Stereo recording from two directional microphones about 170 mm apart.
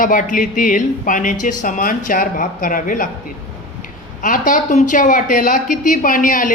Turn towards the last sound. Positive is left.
turn(degrees=50)  # may be behind; listen again after turning